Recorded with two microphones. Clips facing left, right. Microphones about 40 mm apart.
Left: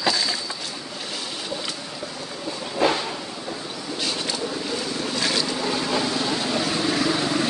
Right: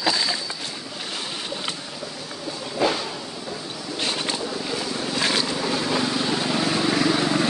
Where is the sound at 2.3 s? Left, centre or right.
Centre.